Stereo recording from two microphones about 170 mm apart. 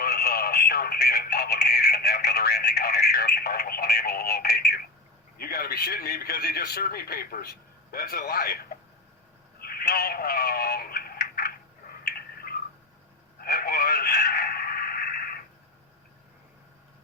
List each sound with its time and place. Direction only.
0.0 s radio: 65° left (ahead or behind)
5.4 s a man's voice: 65° left (ahead or behind)
9.6 s synthetic singing: 65° left (ahead or behind)
12.0 s a sound: 65° left (ahead or behind)
13.4 s radio: 60° left (ahead or behind)